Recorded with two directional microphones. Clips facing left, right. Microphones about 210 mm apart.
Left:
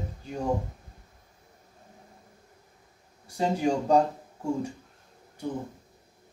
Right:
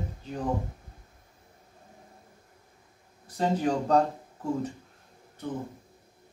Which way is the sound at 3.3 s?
10° left (ahead or behind).